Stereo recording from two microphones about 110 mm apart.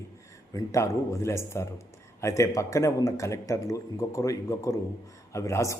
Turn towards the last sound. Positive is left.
turn(degrees=25)  # may be behind; listen again after turning